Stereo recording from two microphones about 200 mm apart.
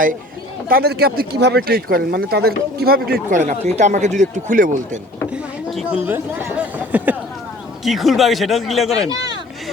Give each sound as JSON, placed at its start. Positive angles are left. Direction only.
{"t": 0.7, "sound": "speech", "side_deg": -50}
{"t": 5.3, "sound": "chatter", "side_deg": -5}
{"t": 7.9, "sound": "speech", "side_deg": 0}
{"t": 8.9, "sound": "speech", "side_deg": -20}